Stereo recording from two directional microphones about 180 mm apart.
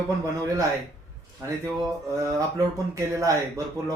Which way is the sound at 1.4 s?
15° right (ahead or behind).